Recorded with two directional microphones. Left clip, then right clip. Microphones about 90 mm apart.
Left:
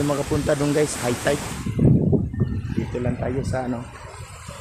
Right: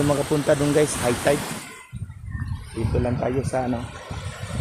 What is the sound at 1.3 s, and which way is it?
Speech, 70° right (ahead or behind).